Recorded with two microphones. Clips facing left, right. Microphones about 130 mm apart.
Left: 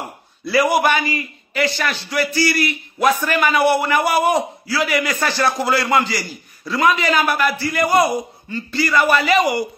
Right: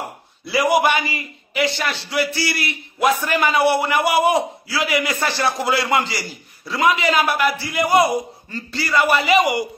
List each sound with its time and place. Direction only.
0.5 s a man's voice: 20° right (ahead or behind)